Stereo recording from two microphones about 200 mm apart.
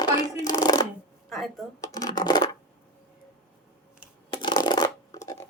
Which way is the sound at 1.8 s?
20° left (ahead or behind).